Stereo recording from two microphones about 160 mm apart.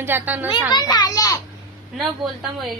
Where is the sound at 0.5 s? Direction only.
30° left (ahead or behind).